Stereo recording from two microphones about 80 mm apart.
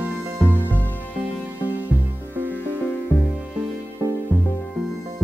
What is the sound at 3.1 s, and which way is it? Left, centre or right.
Music, left.